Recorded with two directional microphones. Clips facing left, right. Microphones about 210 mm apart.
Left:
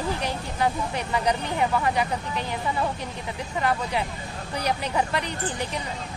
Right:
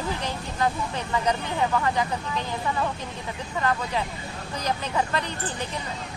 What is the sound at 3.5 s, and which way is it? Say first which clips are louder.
Speech: left 1 dB; 15° left (ahead or behind).